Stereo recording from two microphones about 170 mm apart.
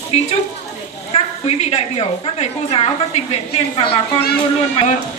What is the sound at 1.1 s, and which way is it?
A woman's voice, 40° left (ahead or behind).